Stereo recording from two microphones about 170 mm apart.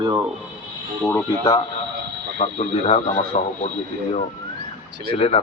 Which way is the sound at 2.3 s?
45° left (ahead or behind).